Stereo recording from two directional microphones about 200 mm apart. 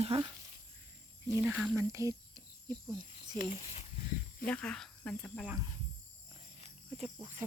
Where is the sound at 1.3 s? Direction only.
10° right (ahead or behind).